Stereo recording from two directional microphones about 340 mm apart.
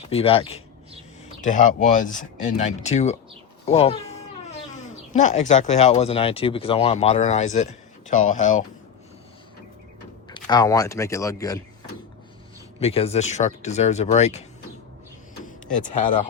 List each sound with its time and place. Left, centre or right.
0.1 s speech: centre
10.2 s speech: centre
12.8 s speech: centre